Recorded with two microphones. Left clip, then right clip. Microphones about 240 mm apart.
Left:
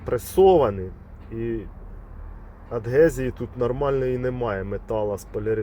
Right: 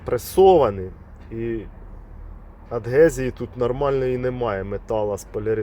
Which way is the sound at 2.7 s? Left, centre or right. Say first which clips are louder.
Right 2 dB; centre.